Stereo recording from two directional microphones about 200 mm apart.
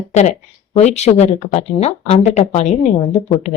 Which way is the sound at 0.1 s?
35° left (ahead or behind).